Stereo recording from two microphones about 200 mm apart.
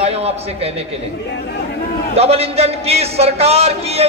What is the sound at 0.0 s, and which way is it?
Speech, 30° right (ahead or behind).